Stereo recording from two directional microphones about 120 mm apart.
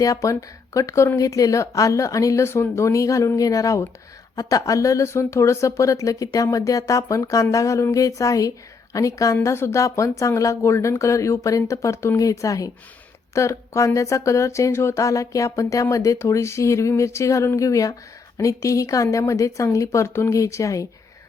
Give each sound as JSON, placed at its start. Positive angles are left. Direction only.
{"t": 0.0, "sound": "speech", "side_deg": 25}